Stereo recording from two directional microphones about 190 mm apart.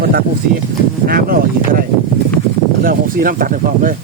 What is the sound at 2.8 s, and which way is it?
Speech, 50° right (ahead or behind).